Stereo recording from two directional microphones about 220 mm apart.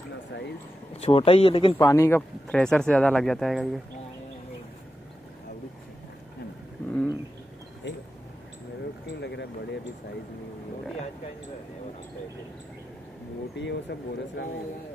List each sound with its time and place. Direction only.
0.9 s speech: 25° left (ahead or behind)
1.8 s speech: 10° left (ahead or behind)
9.2 s a sound: 50° left (ahead or behind)
13.6 s speech: 50° left (ahead or behind)